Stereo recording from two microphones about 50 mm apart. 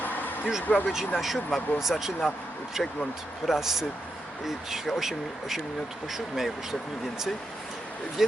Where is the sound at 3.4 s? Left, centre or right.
Centre.